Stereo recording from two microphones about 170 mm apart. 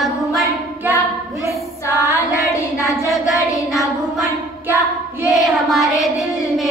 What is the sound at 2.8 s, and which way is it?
Child singing, centre (ahead or behind).